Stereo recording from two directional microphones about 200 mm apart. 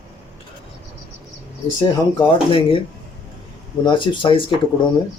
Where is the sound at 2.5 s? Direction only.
25° left (ahead or behind).